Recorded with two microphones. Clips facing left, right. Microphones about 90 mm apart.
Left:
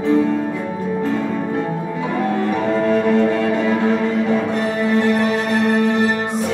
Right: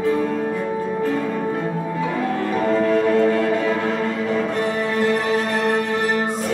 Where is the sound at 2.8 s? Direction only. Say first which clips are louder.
Left 1 dB; 20° left (ahead or behind).